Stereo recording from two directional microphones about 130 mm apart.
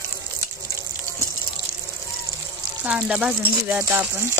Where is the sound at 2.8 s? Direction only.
10° right (ahead or behind).